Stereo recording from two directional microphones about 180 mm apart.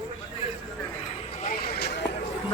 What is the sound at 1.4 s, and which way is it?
Vehicle, 45° left (ahead or behind).